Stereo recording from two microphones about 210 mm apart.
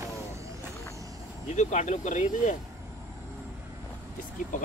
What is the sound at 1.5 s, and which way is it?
Speech, 35° left (ahead or behind).